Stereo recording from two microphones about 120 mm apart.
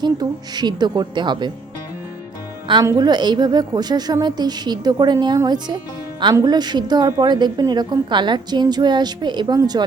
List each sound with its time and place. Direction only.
0.0 s a woman's voice: 35° right (ahead or behind)
2.8 s a woman's voice: 35° right (ahead or behind)